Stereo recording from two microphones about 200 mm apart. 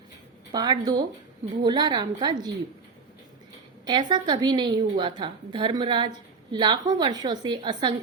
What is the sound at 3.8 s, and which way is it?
A woman's voice, 25° right (ahead or behind).